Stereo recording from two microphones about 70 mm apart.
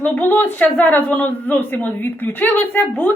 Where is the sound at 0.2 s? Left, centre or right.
Left.